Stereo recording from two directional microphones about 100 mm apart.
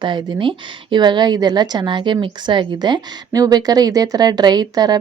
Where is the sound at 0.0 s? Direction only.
50° right (ahead or behind).